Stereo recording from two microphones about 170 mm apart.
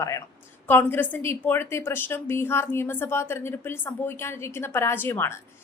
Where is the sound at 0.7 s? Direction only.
10° left (ahead or behind).